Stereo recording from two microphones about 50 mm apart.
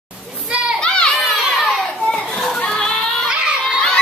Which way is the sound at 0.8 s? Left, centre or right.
Centre.